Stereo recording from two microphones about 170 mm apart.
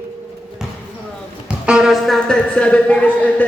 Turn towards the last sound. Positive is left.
turn(degrees=10)  # may be behind; listen again after turning